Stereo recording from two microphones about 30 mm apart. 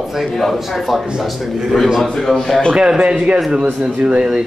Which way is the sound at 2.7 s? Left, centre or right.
Right.